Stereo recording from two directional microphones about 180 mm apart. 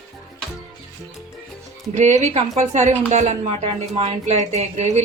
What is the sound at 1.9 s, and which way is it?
A woman's voice, 40° right (ahead or behind).